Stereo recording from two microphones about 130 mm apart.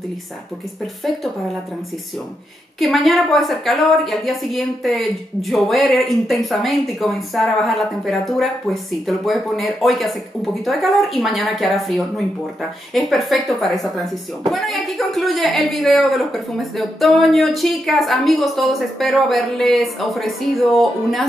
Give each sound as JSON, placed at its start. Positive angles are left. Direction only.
{"t": 2.8, "sound": "a woman's voice", "side_deg": 0}